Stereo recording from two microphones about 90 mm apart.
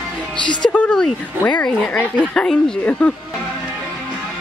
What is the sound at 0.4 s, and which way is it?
Speech, 60° left (ahead or behind).